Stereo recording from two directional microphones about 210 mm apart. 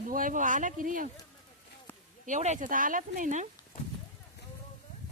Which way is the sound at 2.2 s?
35° right (ahead or behind).